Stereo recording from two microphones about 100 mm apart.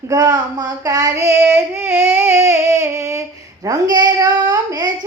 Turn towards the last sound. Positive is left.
turn(degrees=-40)  # may be behind; listen again after turning